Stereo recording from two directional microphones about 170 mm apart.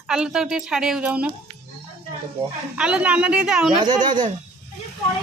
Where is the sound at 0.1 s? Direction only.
5° right (ahead or behind).